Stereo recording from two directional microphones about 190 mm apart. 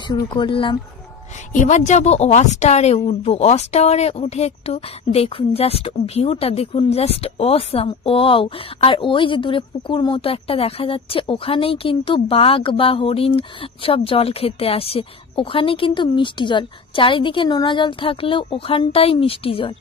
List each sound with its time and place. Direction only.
0.3 s a woman's voice: 25° left (ahead or behind)
1.5 s a woman's voice: 40° left (ahead or behind)